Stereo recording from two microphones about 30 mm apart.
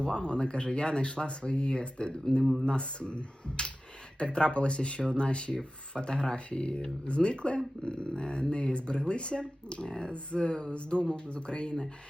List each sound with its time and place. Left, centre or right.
0.0 s speech: left
2.4 s speech: centre
2.6 s speech: left